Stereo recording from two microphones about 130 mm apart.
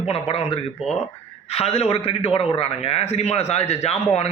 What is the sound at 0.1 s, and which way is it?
A man's voice, 50° left (ahead or behind).